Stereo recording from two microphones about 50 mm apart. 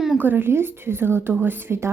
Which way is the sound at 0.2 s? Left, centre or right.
Right.